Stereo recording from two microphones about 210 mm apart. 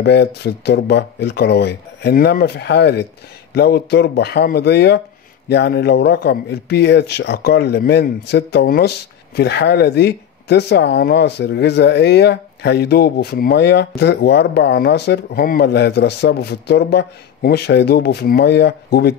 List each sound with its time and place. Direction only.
0.0 s speech: 50° left (ahead or behind)